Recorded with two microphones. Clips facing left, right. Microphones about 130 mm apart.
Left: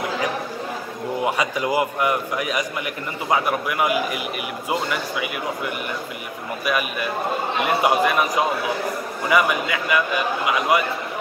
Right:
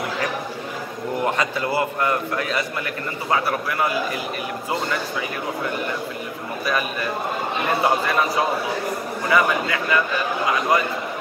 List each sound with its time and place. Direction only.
1.2 s a man's voice: 15° left (ahead or behind)
6.6 s a man's voice: 10° left (ahead or behind)